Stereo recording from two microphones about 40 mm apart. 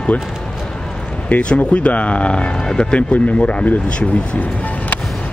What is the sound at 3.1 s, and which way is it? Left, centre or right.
Speech, left.